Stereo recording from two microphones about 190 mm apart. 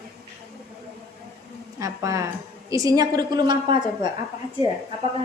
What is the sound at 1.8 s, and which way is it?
A woman's voice, 15° right (ahead or behind).